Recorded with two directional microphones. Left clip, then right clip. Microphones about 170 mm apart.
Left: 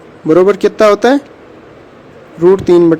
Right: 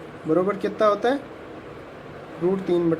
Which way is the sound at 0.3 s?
65° left (ahead or behind).